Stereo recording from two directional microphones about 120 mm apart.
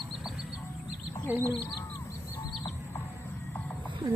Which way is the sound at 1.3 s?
15° right (ahead or behind).